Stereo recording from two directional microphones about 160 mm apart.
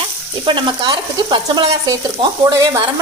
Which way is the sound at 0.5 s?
30° right (ahead or behind).